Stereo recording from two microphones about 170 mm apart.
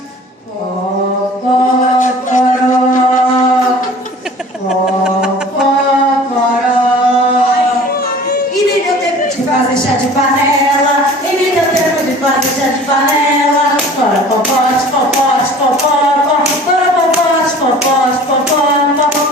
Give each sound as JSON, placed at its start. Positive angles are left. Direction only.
{"t": 2.0, "sound": "music", "side_deg": 50}